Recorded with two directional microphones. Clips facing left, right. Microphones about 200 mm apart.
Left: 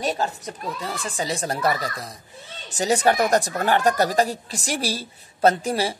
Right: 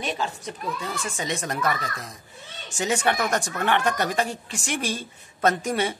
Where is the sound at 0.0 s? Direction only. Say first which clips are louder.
Left 4 dB; 40° left (ahead or behind).